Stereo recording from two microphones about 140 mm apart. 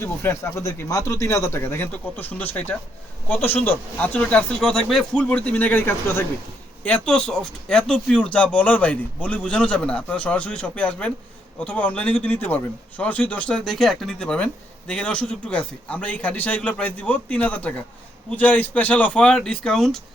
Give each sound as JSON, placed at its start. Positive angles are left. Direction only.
{"t": 0.0, "sound": "speech", "side_deg": 20}